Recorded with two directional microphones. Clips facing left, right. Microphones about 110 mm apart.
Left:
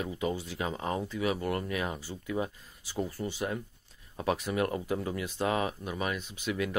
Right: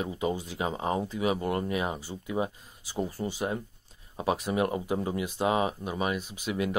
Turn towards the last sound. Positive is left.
turn(degrees=-25)  # may be behind; listen again after turning